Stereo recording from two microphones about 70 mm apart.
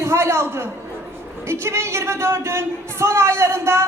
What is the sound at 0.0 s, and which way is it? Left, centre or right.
A man's voice, right.